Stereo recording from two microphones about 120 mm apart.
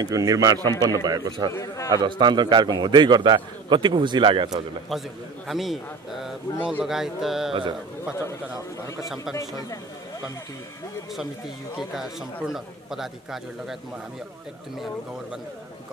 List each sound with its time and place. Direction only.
0.0 s a man's voice: 30° right (ahead or behind)
1.5 s speech: 25° left (ahead or behind)
1.9 s a man's voice: 40° right (ahead or behind)
5.5 s a man's voice: centre (ahead or behind)
8.2 s speech: 25° left (ahead or behind)
11.1 s a man's voice: 5° right (ahead or behind)